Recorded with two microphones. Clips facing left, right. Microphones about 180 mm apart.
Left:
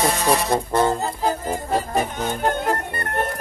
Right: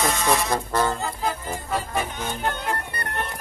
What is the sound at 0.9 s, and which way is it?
Music, 35° left (ahead or behind).